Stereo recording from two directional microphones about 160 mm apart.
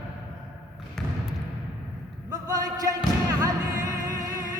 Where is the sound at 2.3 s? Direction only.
20° right (ahead or behind).